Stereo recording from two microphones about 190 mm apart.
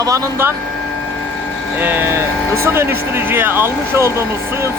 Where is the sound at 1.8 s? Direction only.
10° right (ahead or behind).